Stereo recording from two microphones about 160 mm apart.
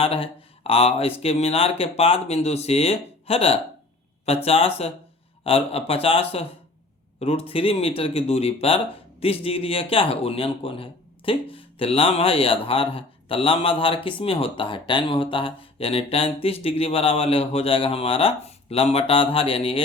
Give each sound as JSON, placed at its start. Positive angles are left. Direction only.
{"t": 0.0, "sound": "speech", "side_deg": 35}